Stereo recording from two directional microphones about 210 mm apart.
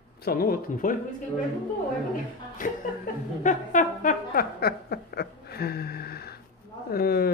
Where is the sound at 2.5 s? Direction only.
40° left (ahead or behind).